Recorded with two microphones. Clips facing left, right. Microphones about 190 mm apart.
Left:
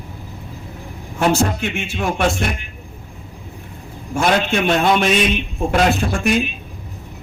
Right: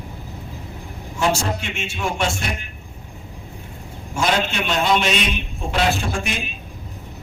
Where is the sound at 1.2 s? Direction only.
55° left (ahead or behind).